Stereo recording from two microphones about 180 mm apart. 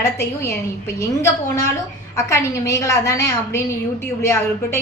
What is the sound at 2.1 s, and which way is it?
A woman's voice, 15° left (ahead or behind).